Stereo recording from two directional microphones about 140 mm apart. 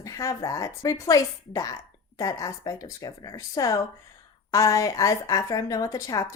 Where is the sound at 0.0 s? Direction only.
25° left (ahead or behind).